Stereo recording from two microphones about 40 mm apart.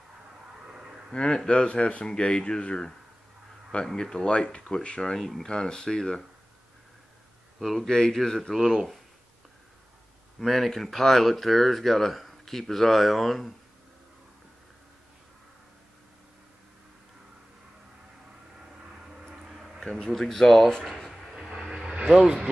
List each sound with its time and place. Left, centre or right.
0.7 s a sound: centre
1.1 s speech: left
7.6 s speech: centre
10.4 s speech: centre
19.8 s speech: centre
21.1 s a sound: centre
21.5 s vehicle: centre
22.1 s speech: centre